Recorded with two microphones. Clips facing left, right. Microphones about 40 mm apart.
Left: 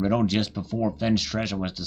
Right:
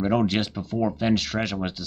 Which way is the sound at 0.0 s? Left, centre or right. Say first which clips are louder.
Right 1 dB; centre.